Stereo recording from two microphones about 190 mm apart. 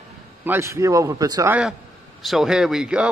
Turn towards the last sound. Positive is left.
turn(degrees=-5)  # may be behind; listen again after turning